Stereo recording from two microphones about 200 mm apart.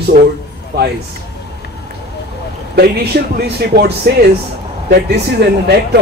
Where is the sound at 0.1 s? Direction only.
45° right (ahead or behind).